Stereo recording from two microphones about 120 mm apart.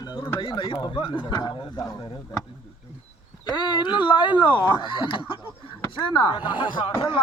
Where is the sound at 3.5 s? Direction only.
40° left (ahead or behind).